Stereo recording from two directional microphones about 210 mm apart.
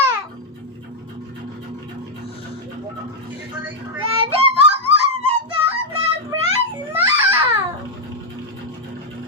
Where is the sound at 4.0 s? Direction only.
25° right (ahead or behind).